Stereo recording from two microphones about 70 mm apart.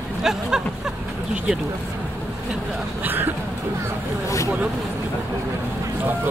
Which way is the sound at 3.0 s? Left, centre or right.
Right.